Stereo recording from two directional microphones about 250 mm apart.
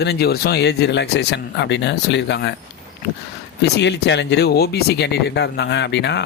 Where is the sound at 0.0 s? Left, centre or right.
Left.